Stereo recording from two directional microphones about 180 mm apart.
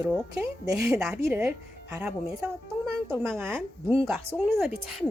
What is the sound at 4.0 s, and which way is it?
Speech, centre (ahead or behind).